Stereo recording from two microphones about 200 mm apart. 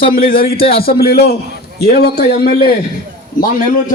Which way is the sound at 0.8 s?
50° left (ahead or behind).